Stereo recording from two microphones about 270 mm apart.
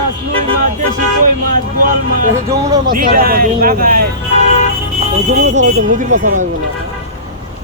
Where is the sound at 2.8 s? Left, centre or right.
Right.